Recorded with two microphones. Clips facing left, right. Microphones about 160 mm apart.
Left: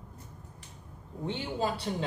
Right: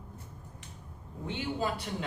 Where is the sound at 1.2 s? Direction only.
30° left (ahead or behind).